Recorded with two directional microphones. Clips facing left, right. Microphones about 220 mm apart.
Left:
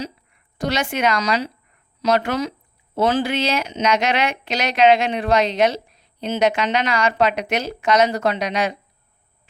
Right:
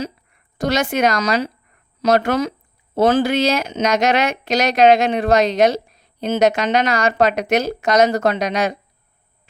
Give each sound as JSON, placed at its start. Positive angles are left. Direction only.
{"t": 0.6, "sound": "speech", "side_deg": -45}